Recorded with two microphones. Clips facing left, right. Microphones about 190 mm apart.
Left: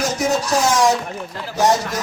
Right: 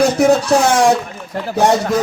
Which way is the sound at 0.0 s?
60° right (ahead or behind).